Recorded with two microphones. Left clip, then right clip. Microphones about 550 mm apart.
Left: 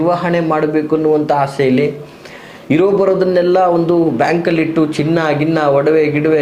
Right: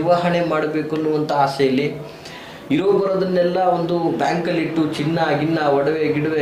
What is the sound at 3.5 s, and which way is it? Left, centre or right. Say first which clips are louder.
A man's voice: left 7 dB; left.